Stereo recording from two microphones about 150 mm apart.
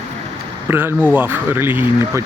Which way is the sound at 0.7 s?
15° right (ahead or behind).